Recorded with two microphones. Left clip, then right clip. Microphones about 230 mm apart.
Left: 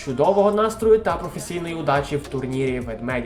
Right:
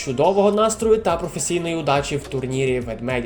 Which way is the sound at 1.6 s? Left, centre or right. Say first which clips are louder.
Even; right.